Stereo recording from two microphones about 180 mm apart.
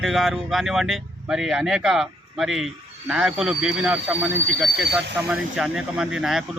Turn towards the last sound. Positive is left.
turn(degrees=0)  # may be behind; listen again after turning